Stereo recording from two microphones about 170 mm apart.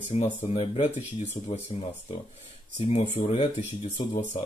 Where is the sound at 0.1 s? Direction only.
35° left (ahead or behind).